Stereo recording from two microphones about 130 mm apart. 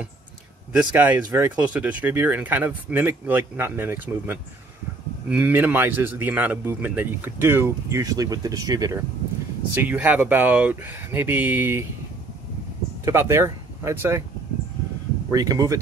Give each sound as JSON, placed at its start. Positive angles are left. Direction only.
{"t": 0.7, "sound": "speech", "side_deg": -15}
{"t": 9.8, "sound": "speech", "side_deg": -10}
{"t": 13.0, "sound": "speech", "side_deg": -20}
{"t": 15.3, "sound": "speech", "side_deg": -30}